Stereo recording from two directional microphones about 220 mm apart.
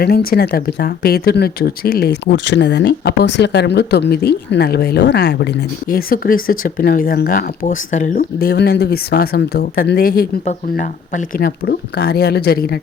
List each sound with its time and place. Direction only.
0.0 s speech: 45° left (ahead or behind)
5.9 s speech: 40° left (ahead or behind)